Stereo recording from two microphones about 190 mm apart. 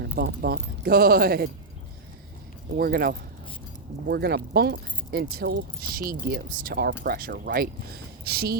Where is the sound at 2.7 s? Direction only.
55° right (ahead or behind).